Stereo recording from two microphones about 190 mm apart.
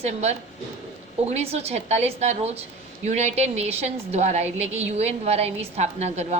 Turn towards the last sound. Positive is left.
turn(degrees=-35)  # may be behind; listen again after turning